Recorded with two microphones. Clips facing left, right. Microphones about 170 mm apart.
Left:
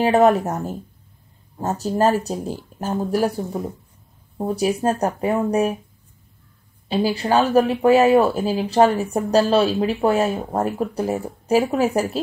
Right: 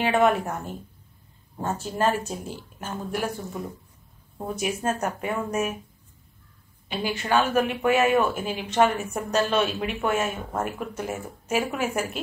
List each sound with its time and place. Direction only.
0.0 s speech: 40° left (ahead or behind)
6.9 s speech: 35° left (ahead or behind)